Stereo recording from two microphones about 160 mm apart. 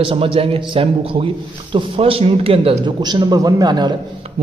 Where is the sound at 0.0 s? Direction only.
35° right (ahead or behind).